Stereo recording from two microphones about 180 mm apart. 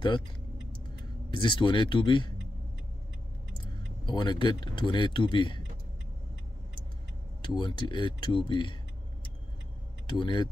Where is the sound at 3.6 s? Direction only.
25° left (ahead or behind).